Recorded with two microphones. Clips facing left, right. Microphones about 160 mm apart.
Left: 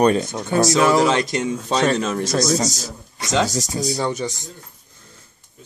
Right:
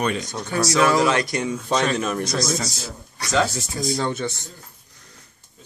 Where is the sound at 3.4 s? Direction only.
40° left (ahead or behind).